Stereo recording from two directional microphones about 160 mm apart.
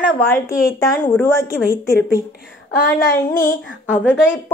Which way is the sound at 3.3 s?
60° left (ahead or behind).